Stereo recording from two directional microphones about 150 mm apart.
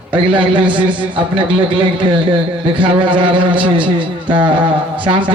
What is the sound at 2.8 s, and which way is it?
A man's voice, 35° right (ahead or behind).